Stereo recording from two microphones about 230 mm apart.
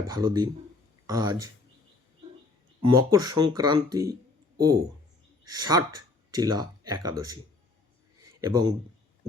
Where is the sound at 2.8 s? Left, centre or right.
Centre.